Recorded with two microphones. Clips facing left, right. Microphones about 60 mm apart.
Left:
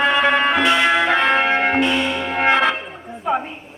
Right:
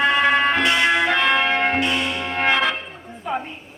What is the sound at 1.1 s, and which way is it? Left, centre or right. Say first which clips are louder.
Church bell: left 2 dB; centre.